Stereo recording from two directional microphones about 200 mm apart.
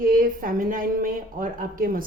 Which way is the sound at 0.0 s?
45° right (ahead or behind).